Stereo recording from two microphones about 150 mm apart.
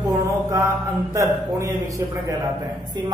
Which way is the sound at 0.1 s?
15° right (ahead or behind).